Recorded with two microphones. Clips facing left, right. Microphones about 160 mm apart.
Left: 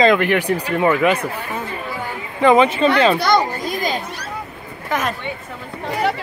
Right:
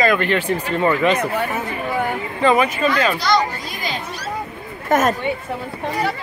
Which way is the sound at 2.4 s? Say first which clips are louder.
Left 4 dB; 20° left (ahead or behind).